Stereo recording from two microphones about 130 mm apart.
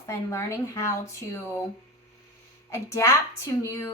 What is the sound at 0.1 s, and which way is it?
Speech, 20° left (ahead or behind).